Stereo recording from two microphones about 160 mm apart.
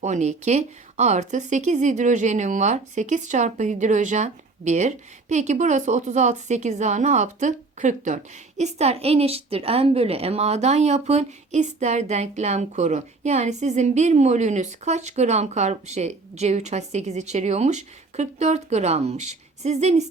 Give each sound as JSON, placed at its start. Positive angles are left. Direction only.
{"t": 0.0, "sound": "speech", "side_deg": -45}